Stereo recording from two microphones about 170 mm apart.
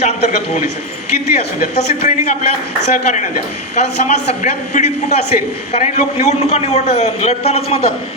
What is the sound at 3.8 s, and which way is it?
A man's voice, 45° left (ahead or behind).